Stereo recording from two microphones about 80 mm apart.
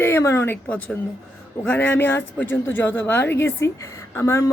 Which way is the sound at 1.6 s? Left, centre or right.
Left.